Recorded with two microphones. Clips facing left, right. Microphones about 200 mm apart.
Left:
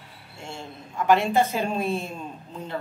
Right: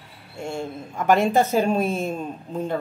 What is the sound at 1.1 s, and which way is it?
A woman's voice, 45° right (ahead or behind).